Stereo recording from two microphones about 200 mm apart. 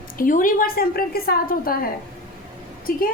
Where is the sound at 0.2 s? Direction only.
40° left (ahead or behind).